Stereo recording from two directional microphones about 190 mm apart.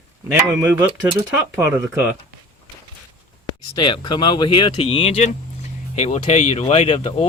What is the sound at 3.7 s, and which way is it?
Speech, 25° left (ahead or behind).